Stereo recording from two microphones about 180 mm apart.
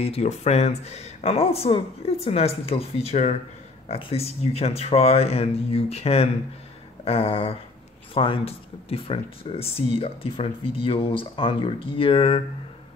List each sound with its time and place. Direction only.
0.0 s speech: 35° left (ahead or behind)